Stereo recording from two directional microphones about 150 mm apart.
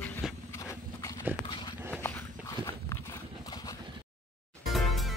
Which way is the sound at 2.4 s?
25° left (ahead or behind).